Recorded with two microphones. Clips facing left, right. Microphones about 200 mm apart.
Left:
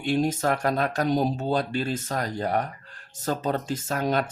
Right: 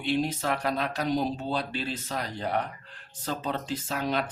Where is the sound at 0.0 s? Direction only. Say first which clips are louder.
Left 4 dB; 45° left (ahead or behind).